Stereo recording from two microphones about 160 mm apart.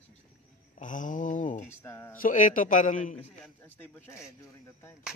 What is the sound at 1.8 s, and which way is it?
Speech, 15° left (ahead or behind).